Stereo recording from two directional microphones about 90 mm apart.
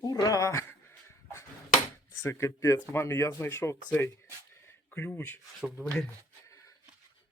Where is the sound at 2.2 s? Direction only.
30° left (ahead or behind).